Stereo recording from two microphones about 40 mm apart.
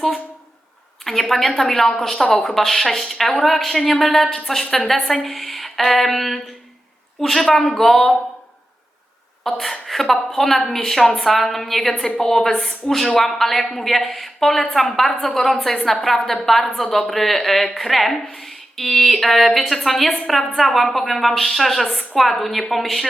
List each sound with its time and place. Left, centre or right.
1.0 s a woman's voice: centre
9.4 s a woman's voice: centre
12.5 s a woman's voice: centre
13.1 s a woman's voice: centre